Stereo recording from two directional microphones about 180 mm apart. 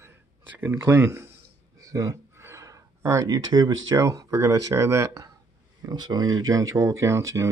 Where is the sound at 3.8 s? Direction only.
20° right (ahead or behind).